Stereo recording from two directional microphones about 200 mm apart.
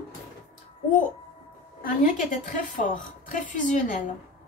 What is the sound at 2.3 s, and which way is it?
A woman's voice, 40° left (ahead or behind).